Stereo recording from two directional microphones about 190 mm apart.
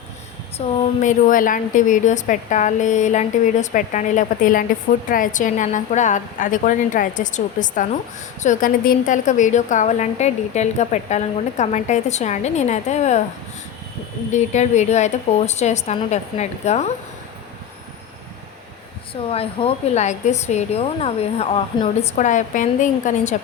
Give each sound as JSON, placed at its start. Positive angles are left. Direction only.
{"t": 0.6, "sound": "a woman's voice", "side_deg": 35}
{"t": 1.0, "sound": "a woman's voice", "side_deg": 45}
{"t": 14.3, "sound": "a woman's voice", "side_deg": 40}
{"t": 19.3, "sound": "a woman's voice", "side_deg": 30}